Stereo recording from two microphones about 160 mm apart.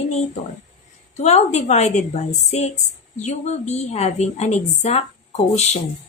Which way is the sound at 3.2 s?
45° left (ahead or behind).